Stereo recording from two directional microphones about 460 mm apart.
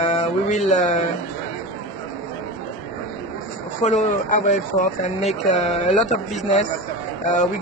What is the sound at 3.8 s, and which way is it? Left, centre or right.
Speech, centre.